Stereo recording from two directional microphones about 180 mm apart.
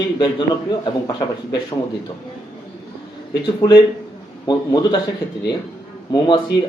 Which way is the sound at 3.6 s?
20° left (ahead or behind).